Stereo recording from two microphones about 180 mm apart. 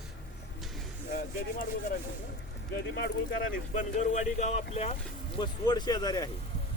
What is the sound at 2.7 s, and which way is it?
Speech, 60° left (ahead or behind).